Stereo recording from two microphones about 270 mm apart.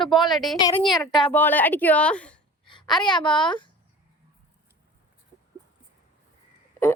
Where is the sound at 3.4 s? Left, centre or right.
Centre.